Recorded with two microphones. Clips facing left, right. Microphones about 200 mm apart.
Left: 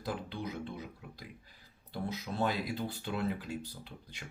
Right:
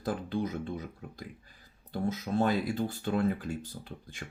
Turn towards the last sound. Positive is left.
turn(degrees=-45)  # may be behind; listen again after turning